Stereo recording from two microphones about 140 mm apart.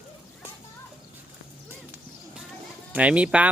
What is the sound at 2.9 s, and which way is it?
Speech, 10° right (ahead or behind).